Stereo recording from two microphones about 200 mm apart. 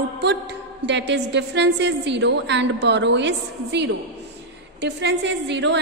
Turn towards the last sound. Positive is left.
turn(degrees=-60)  # may be behind; listen again after turning